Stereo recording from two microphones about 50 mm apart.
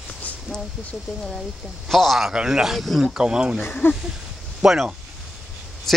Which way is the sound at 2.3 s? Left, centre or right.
Centre.